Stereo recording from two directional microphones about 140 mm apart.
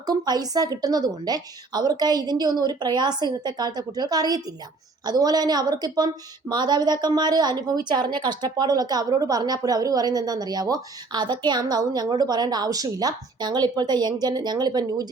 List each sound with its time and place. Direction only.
0.0 s a woman's voice: 30° right (ahead or behind)